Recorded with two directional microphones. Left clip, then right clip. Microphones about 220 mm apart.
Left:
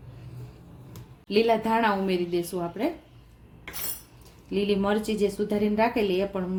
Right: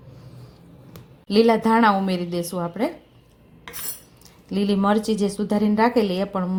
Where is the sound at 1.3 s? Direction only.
30° right (ahead or behind).